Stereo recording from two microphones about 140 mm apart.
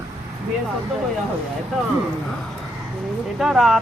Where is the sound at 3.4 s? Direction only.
Centre (ahead or behind).